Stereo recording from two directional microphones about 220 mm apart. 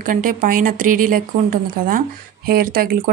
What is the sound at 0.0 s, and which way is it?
Speech, 40° right (ahead or behind).